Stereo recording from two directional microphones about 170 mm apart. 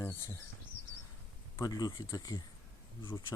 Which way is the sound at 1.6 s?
25° left (ahead or behind).